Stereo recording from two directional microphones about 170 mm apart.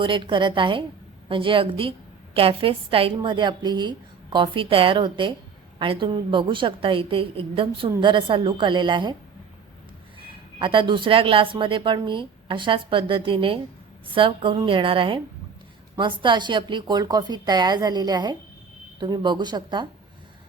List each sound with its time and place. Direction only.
0.0 s a woman's voice: 30° right (ahead or behind)
10.6 s a woman's voice: 30° right (ahead or behind)